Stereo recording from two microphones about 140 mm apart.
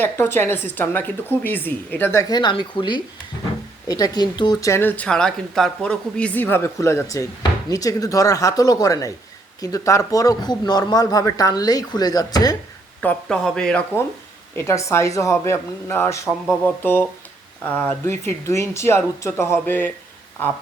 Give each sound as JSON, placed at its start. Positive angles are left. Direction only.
{"t": 0.0, "sound": "speech", "side_deg": 15}
{"t": 2.3, "sound": "a man's voice", "side_deg": 30}
{"t": 4.7, "sound": "a man's voice", "side_deg": 15}
{"t": 13.0, "sound": "speech", "side_deg": 5}
{"t": 14.5, "sound": "a man's voice", "side_deg": 20}